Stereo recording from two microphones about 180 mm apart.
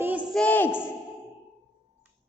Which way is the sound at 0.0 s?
10° right (ahead or behind).